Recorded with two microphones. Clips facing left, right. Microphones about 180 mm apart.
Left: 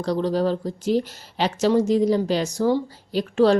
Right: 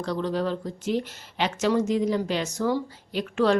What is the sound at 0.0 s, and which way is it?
Speech, 35° left (ahead or behind).